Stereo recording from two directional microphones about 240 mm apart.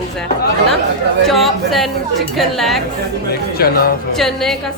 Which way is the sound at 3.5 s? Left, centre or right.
Left.